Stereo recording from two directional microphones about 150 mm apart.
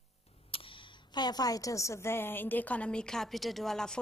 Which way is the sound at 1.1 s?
25° left (ahead or behind).